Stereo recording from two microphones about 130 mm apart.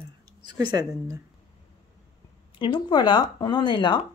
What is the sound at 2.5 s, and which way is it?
Speech, 40° left (ahead or behind).